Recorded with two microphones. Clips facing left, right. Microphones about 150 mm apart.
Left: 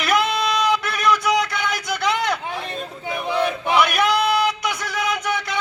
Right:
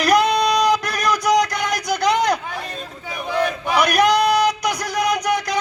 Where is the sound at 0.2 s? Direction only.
Centre (ahead or behind).